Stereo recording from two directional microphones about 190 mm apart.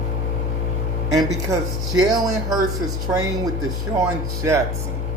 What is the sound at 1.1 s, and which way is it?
Speech, 20° right (ahead or behind).